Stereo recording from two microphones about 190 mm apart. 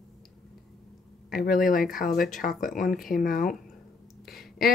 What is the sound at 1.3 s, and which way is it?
Speech, 50° left (ahead or behind).